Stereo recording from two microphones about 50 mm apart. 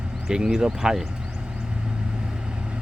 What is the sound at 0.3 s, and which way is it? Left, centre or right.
Speech, centre.